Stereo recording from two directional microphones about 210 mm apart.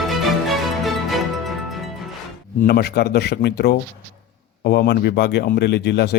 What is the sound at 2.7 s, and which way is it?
A man's voice, 50° left (ahead or behind).